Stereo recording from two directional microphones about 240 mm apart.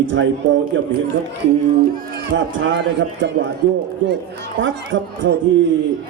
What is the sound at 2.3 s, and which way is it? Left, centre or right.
A man's voice, right.